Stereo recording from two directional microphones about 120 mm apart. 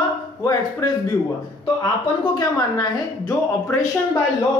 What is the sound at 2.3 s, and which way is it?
A woman's voice, 30° left (ahead or behind).